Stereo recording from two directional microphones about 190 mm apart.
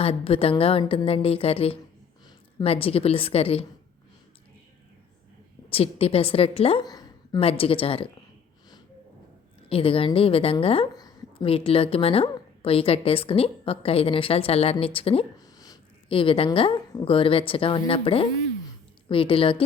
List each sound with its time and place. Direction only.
0.0 s a woman's voice: 30° left (ahead or behind)
5.6 s a woman's voice: 30° left (ahead or behind)
9.6 s a woman's voice: 30° left (ahead or behind)
15.5 s a woman's voice: 20° left (ahead or behind)